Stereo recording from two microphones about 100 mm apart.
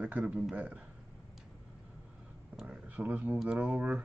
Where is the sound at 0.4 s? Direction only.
10° right (ahead or behind).